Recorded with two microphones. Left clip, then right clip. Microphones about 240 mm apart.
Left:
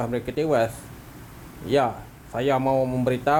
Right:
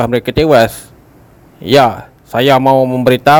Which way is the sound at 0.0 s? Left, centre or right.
Right.